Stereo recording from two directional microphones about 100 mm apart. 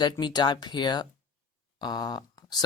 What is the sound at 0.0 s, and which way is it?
Speech, 45° left (ahead or behind).